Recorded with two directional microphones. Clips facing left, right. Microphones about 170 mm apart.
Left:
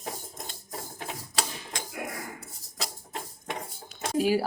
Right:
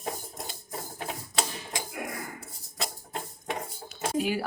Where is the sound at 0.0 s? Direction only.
5° right (ahead or behind).